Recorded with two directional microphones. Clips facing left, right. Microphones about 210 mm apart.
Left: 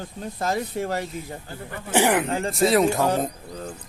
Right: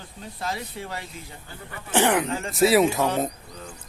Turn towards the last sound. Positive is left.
turn(degrees=45)  # may be behind; listen again after turning